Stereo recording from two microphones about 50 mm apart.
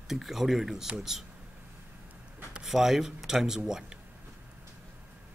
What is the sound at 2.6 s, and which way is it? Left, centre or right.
Speech, centre.